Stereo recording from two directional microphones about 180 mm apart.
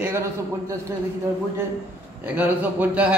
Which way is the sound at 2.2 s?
10° right (ahead or behind).